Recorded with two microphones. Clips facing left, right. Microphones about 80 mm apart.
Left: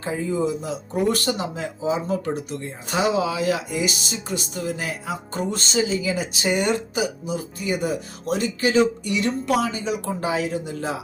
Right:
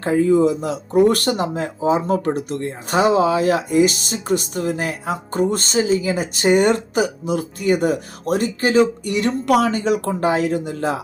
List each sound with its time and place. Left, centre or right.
0.0 s speech: right